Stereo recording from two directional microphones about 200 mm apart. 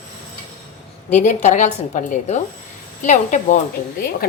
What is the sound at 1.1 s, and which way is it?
A woman's voice, 35° left (ahead or behind).